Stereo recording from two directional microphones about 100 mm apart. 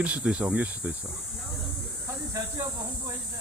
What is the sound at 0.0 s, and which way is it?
Speech, 10° right (ahead or behind).